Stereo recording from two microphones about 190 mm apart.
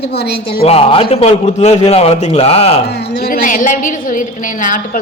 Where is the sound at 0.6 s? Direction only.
30° left (ahead or behind).